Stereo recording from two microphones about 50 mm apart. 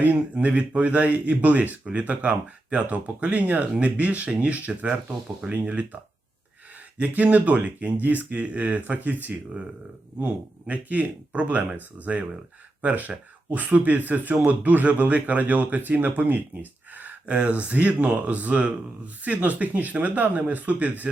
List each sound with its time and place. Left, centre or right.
0.3 s speech: right
7.0 s speech: right